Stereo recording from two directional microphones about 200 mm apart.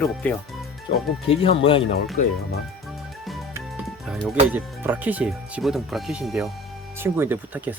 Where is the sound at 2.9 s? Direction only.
Centre (ahead or behind).